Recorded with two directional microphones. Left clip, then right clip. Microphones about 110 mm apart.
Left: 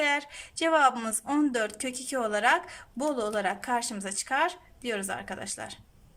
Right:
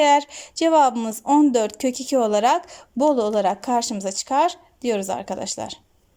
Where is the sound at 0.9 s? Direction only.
25° right (ahead or behind); by 5.7 s 45° right (ahead or behind).